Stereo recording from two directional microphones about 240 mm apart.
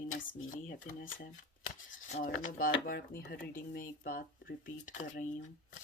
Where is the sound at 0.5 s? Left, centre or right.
Left.